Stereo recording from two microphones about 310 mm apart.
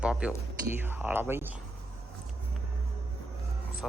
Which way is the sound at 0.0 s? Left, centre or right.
Centre.